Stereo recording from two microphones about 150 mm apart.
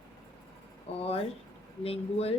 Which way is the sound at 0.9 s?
45° left (ahead or behind).